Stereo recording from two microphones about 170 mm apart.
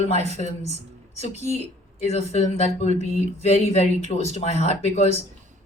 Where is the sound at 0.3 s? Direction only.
40° left (ahead or behind).